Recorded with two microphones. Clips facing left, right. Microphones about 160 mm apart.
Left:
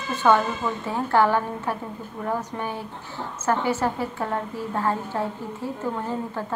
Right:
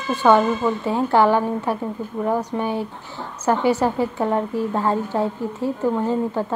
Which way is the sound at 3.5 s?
15° right (ahead or behind).